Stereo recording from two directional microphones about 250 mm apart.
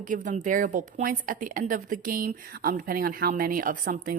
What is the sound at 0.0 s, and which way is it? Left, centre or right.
A woman's voice, right.